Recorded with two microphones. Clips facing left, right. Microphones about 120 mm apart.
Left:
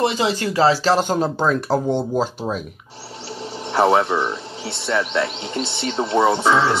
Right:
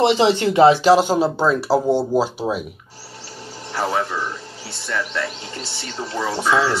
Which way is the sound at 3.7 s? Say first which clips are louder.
Left 6 dB; 65° left (ahead or behind).